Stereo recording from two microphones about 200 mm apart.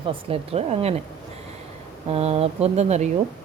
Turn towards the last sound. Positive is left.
turn(degrees=-35)  # may be behind; listen again after turning